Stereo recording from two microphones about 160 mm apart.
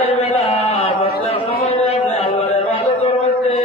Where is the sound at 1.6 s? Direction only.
40° left (ahead or behind).